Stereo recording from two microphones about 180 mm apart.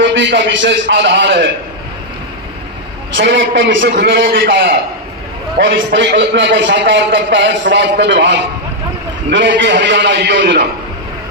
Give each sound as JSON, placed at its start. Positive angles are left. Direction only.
{"t": 0.0, "sound": "a man's voice", "side_deg": -85}
{"t": 3.2, "sound": "a man's voice", "side_deg": -90}
{"t": 4.0, "sound": "a man's voice", "side_deg": -75}